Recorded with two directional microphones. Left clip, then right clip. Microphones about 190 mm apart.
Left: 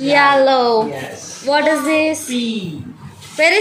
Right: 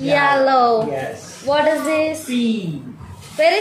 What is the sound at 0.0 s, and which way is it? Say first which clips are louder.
A woman's voice: left 3 dB; 35° left (ahead or behind).